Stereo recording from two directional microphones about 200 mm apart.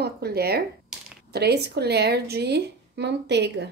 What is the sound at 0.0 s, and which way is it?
A woman's voice, 55° right (ahead or behind).